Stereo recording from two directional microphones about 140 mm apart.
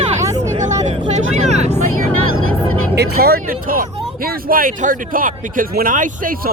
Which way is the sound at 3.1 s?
90° right.